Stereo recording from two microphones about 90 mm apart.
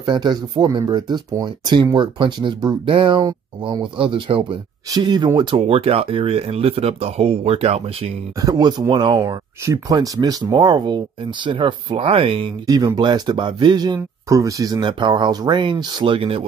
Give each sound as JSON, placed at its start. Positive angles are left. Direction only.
{"t": 0.0, "sound": "speech", "side_deg": -55}
{"t": 3.8, "sound": "speech", "side_deg": -75}
{"t": 4.9, "sound": "speech", "side_deg": -50}
{"t": 8.4, "sound": "speech", "side_deg": -50}
{"t": 11.4, "sound": "speech", "side_deg": -65}
{"t": 12.6, "sound": "speech", "side_deg": -45}
{"t": 14.8, "sound": "speech", "side_deg": -65}